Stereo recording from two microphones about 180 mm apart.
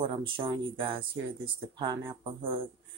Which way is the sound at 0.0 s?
25° right (ahead or behind).